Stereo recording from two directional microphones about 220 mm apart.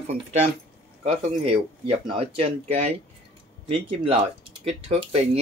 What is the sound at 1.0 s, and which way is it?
Speech, 30° right (ahead or behind).